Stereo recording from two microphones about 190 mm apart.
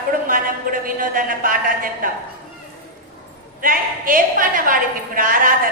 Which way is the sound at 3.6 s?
45° right (ahead or behind).